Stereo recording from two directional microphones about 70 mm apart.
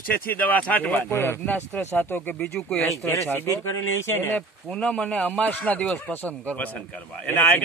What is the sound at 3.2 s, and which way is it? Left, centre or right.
Speech, left.